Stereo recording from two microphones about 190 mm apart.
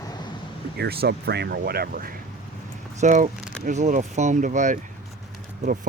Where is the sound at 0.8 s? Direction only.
55° right (ahead or behind).